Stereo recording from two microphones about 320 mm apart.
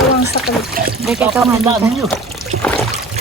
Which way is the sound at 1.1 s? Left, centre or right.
Centre.